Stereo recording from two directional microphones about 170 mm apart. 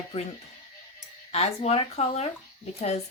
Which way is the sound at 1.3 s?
35° left (ahead or behind).